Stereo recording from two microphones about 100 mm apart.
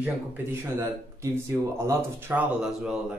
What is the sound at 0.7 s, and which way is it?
Speech, 25° right (ahead or behind).